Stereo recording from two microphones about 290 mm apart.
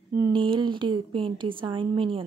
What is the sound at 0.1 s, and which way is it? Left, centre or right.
A woman's voice, centre.